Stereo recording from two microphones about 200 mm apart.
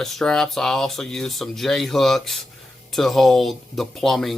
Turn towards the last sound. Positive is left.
turn(degrees=0)  # may be behind; listen again after turning